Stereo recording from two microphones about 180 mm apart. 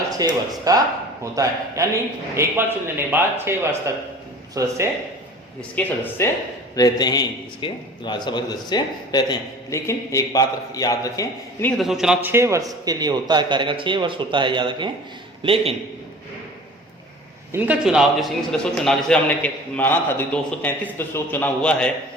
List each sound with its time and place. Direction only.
0.2 s a man's voice: 20° right (ahead or behind)
5.7 s a man's voice: 15° left (ahead or behind)
11.8 s a man's voice: centre (ahead or behind); by 15.7 s 30° right (ahead or behind)
17.5 s a man's voice: 10° right (ahead or behind)